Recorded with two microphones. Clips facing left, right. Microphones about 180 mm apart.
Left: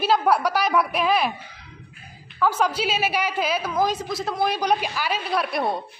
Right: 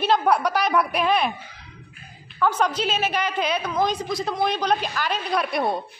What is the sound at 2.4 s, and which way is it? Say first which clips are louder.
A woman's voice: even; 5° left (ahead or behind).